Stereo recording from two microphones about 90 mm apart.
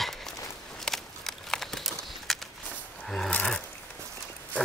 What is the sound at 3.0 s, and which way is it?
Filing, 10° left (ahead or behind).